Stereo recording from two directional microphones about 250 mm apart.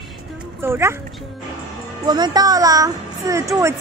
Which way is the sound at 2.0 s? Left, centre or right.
Centre.